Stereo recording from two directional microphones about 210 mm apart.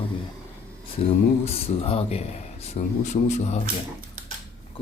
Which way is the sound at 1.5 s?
30° left (ahead or behind).